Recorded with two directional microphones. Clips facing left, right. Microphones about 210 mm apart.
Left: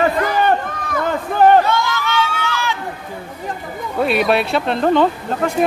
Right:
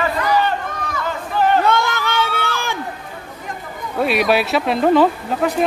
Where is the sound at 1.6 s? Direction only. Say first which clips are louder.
Right 1 dB; 55° right (ahead or behind).